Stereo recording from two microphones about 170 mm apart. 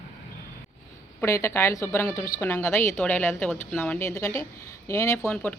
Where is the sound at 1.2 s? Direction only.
15° left (ahead or behind).